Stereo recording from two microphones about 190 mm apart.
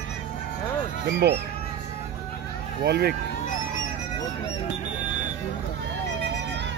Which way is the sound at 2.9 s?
55° right (ahead or behind).